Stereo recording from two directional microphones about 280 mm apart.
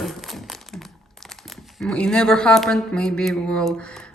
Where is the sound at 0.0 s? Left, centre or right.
Centre.